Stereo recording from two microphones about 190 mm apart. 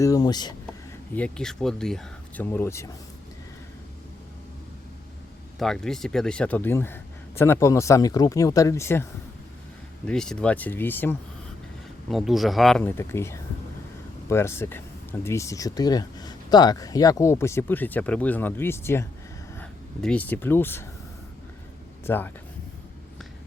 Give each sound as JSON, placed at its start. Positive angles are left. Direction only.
{"t": 0.0, "sound": "speech", "side_deg": 20}
{"t": 1.1, "sound": "speech", "side_deg": 5}
{"t": 5.5, "sound": "speech", "side_deg": 0}
{"t": 10.1, "sound": "speech", "side_deg": 5}
{"t": 12.0, "sound": "speech", "side_deg": 0}
{"t": 22.0, "sound": "speech", "side_deg": 10}